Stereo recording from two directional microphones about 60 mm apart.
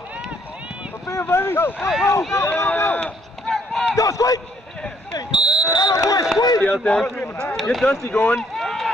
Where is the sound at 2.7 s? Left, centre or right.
Left.